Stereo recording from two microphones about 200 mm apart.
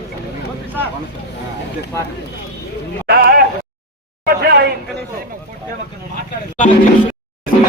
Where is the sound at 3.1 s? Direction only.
50° right (ahead or behind).